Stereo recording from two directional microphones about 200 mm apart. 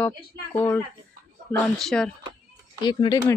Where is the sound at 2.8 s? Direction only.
20° left (ahead or behind).